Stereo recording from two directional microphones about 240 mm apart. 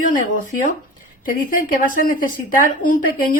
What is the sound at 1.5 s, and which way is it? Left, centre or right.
A woman's voice, left.